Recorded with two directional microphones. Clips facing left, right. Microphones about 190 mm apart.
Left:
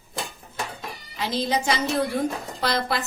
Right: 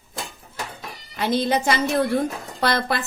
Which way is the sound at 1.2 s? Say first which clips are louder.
Right 4 dB; 55° right (ahead or behind).